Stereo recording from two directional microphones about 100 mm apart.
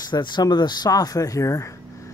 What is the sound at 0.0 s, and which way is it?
Speech, 45° left (ahead or behind).